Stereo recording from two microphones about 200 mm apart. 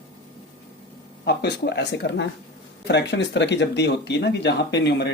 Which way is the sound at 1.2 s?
60° left (ahead or behind).